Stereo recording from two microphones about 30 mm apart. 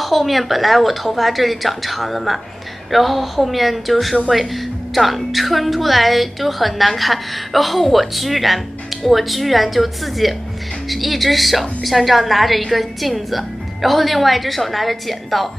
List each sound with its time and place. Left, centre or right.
0.0 s a woman's voice: centre